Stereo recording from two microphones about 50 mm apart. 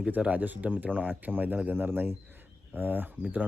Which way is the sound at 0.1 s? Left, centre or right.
Right.